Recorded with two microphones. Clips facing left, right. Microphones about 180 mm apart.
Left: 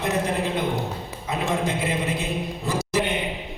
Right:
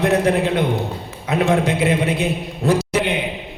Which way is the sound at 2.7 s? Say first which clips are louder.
Right 7 dB; 70° right (ahead or behind).